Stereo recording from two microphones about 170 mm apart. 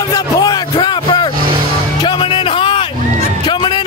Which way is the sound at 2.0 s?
30° left (ahead or behind).